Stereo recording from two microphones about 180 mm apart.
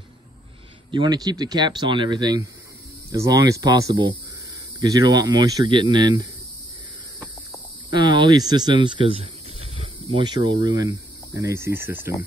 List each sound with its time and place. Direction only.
0.9 s speech: 25° right (ahead or behind)
7.9 s speech: 25° right (ahead or behind)